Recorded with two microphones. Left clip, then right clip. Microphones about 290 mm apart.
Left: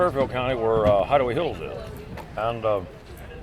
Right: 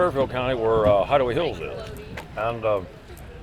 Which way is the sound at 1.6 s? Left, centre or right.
Centre.